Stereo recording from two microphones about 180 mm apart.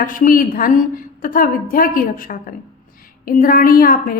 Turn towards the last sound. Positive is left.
turn(degrees=50)  # may be behind; listen again after turning